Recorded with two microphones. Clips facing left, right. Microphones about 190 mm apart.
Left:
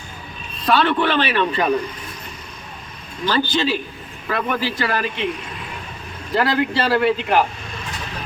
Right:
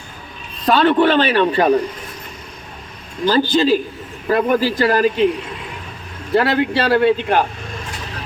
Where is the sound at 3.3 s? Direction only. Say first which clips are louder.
Right 6 dB; 35° right (ahead or behind).